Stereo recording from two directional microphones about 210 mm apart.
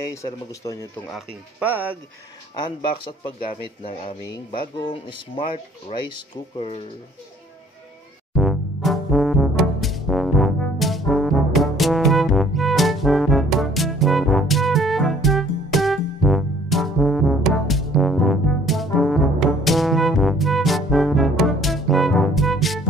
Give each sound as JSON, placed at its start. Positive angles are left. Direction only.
{"t": 0.1, "sound": "speech", "side_deg": 15}
{"t": 1.1, "sound": "speech", "side_deg": -5}
{"t": 2.6, "sound": "speech", "side_deg": 25}
{"t": 8.4, "sound": "music", "side_deg": 0}